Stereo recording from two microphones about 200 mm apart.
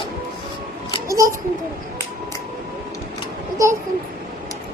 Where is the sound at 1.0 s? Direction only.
15° right (ahead or behind).